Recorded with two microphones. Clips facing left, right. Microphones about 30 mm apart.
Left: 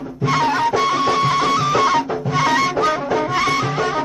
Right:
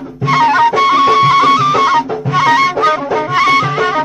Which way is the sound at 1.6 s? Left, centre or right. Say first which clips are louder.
Right 5 dB; centre.